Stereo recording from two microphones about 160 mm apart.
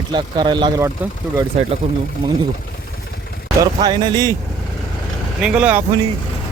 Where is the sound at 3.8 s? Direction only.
25° right (ahead or behind).